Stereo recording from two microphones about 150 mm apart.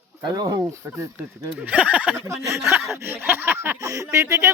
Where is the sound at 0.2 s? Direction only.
25° right (ahead or behind).